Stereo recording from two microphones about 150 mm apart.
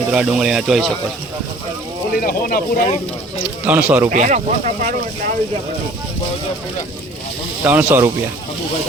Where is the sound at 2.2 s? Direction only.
75° left (ahead or behind).